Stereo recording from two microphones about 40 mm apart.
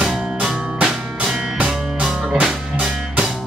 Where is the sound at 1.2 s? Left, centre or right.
Centre.